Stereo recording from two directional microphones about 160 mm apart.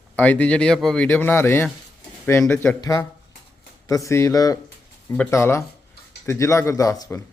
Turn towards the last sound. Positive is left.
turn(degrees=20)  # may be behind; listen again after turning